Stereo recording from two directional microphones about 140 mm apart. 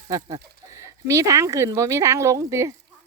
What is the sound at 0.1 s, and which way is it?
Speech, 25° right (ahead or behind).